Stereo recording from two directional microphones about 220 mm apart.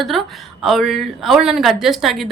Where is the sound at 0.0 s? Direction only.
Centre (ahead or behind).